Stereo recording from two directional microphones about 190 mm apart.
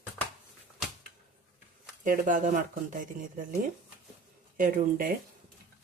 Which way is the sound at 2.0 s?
45° right (ahead or behind).